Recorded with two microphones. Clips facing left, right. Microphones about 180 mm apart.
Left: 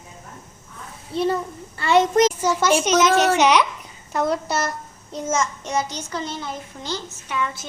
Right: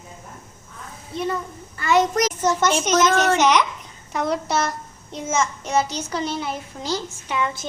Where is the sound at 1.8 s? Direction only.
30° left (ahead or behind).